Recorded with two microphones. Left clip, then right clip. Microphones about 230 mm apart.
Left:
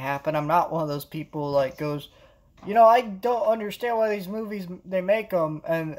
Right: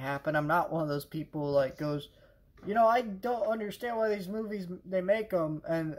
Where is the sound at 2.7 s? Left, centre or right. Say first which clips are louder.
Left 9 dB; left.